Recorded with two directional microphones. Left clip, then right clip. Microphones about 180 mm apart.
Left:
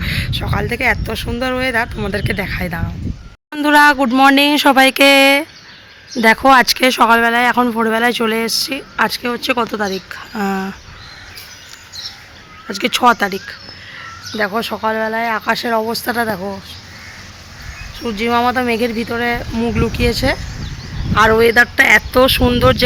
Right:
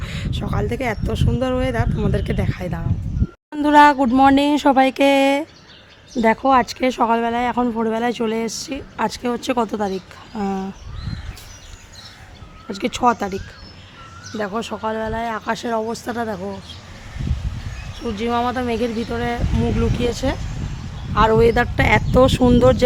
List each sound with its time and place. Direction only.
0.0 s speech: 10° right (ahead or behind)
9.0 s speech: 15° right (ahead or behind)
12.6 s speech: 5° right (ahead or behind); by 16.4 s 15° left (ahead or behind)
18.0 s speech: 20° left (ahead or behind)
21.2 s speech: 5° right (ahead or behind)